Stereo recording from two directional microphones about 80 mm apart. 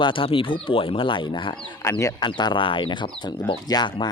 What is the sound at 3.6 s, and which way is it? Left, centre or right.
Speech, left.